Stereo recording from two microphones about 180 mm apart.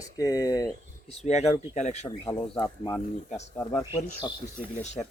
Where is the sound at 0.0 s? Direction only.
20° left (ahead or behind).